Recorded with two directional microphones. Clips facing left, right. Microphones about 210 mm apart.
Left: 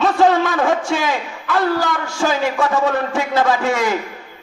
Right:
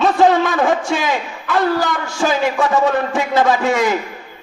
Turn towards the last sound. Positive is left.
turn(degrees=-20)  # may be behind; listen again after turning